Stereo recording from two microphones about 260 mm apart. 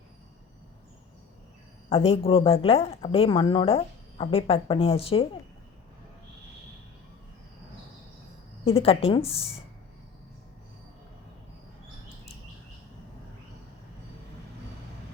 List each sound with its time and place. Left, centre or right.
1.9 s speech: left
8.6 s speech: left